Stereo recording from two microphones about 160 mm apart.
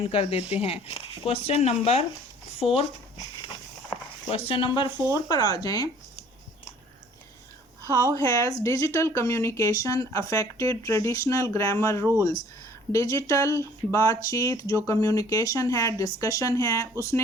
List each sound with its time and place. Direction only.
0.0 s speech: 35° left (ahead or behind)
4.4 s speech: 30° left (ahead or behind)
8.1 s speech: 20° left (ahead or behind)